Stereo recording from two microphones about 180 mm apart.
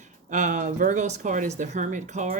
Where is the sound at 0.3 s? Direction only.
45° right (ahead or behind).